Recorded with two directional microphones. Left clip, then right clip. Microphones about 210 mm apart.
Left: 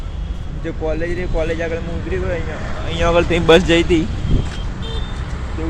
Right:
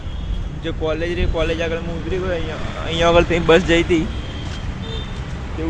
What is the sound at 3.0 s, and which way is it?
Speech, 10° right (ahead or behind).